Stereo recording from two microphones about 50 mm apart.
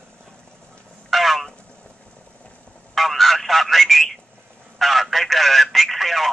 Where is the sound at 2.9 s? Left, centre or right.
Centre.